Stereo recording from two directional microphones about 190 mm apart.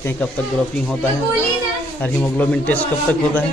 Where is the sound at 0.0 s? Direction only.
10° left (ahead or behind).